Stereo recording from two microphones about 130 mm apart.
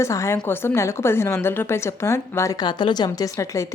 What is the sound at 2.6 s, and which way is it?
Speech, 35° left (ahead or behind).